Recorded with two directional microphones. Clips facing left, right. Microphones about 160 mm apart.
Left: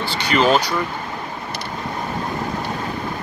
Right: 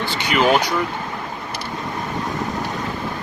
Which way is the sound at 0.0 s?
15° right (ahead or behind).